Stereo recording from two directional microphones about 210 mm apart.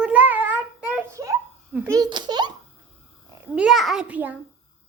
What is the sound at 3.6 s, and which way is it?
Speech, centre (ahead or behind).